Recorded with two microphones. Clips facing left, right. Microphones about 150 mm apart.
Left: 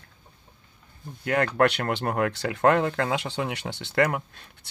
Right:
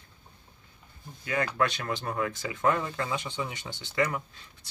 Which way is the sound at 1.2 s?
65° left (ahead or behind).